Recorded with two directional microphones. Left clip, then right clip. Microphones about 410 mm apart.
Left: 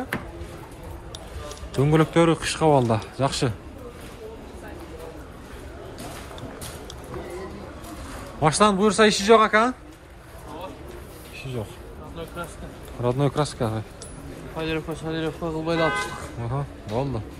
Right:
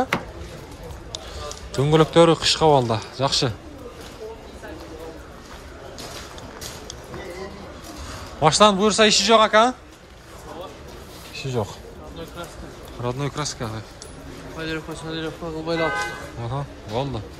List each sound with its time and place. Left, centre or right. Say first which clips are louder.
1.7 s speech: right 3 dB; centre
8.4 s speech: right 4 dB; centre
11.3 s a sound: right 7 dB; centre
13.0 s speech: left 4 dB; centre
14.6 s a man's voice: left 2 dB; centre
16.4 s speech: right 1 dB; centre